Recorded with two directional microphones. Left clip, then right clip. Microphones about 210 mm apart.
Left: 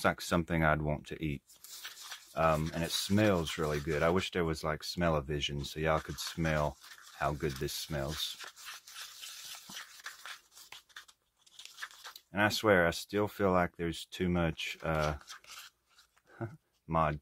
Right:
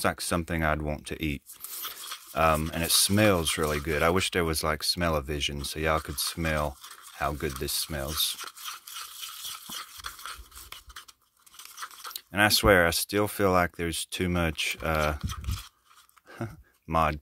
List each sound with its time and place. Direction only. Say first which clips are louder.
0.0 s speech: right 3 dB; 25° right (ahead or behind)
11.6 s crunch: right 5 dB; 10° right (ahead or behind)
12.3 s speech: right 7 dB; 40° right (ahead or behind)
16.9 s speech: right 5 dB; 40° right (ahead or behind)